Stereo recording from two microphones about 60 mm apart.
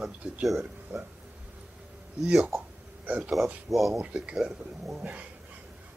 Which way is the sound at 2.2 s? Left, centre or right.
Centre.